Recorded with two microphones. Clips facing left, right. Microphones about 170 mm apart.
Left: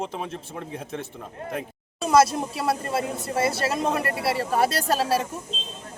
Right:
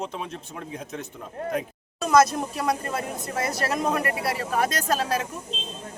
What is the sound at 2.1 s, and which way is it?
Speech, 30° left (ahead or behind).